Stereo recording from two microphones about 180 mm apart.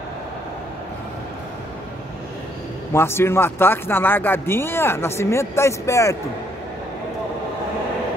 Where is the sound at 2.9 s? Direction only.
15° left (ahead or behind).